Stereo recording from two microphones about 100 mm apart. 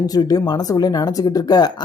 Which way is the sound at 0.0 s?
40° left (ahead or behind).